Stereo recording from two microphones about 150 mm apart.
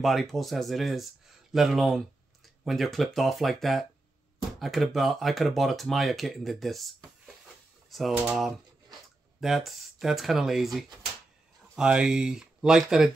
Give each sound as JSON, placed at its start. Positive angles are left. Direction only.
{"t": 0.0, "sound": "speech", "side_deg": 0}
{"t": 9.4, "sound": "speech", "side_deg": 0}